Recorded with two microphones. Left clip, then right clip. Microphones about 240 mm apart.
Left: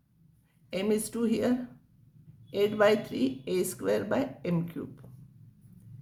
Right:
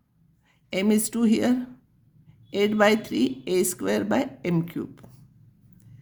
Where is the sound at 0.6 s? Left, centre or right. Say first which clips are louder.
Right 5 dB; right.